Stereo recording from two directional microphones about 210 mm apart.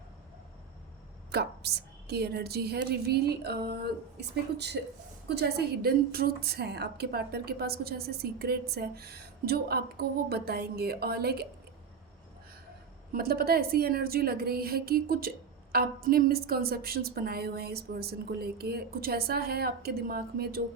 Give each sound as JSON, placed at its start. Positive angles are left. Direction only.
{"t": 1.3, "sound": "a woman's voice", "side_deg": -50}
{"t": 13.1, "sound": "a woman's voice", "side_deg": -45}